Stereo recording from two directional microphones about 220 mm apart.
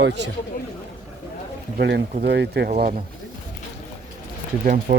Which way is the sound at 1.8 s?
50° right (ahead or behind).